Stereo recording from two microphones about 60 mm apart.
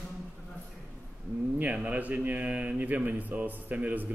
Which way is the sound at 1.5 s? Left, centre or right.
Right.